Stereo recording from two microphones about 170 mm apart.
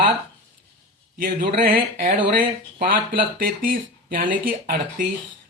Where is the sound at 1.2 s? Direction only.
55° right (ahead or behind).